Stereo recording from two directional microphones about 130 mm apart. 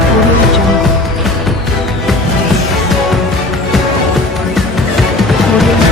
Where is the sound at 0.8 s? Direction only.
Centre (ahead or behind).